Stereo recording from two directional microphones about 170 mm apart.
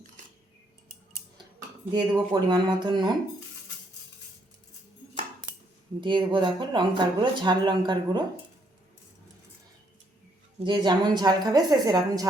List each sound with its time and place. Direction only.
1.9 s speech: 25° right (ahead or behind)
6.0 s speech: 30° right (ahead or behind)
10.6 s speech: 25° right (ahead or behind)